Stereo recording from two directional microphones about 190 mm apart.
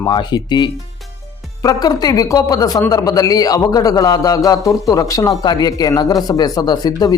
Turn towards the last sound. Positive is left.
turn(degrees=20)  # may be behind; listen again after turning